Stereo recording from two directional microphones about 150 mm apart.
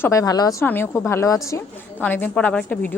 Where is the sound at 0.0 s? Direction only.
20° left (ahead or behind).